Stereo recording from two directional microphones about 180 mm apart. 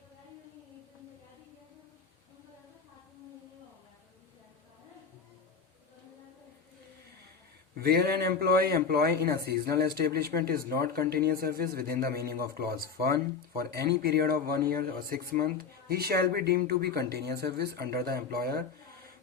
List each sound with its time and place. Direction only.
7.8 s a man's voice: 60° right (ahead or behind)